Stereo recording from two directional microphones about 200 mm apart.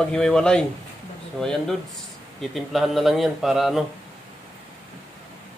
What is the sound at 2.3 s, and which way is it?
Speech, centre (ahead or behind).